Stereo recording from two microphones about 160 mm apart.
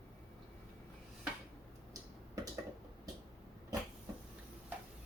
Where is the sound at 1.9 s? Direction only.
20° right (ahead or behind).